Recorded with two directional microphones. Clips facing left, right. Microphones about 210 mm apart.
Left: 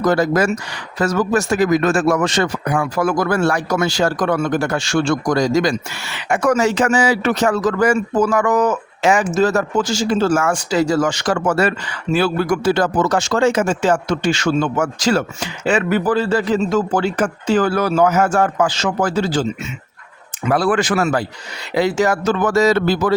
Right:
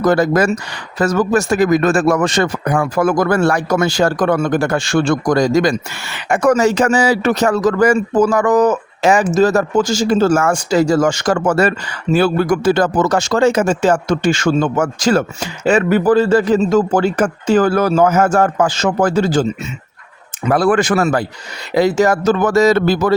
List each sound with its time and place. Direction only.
0.0 s a man's voice: 55° right (ahead or behind)
20.5 s a man's voice: 50° right (ahead or behind)